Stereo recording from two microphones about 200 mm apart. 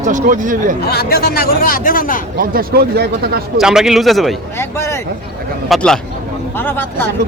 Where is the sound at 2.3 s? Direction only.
45° right (ahead or behind).